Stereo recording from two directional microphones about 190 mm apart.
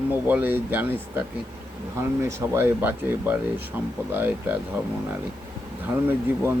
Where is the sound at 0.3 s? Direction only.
10° right (ahead or behind).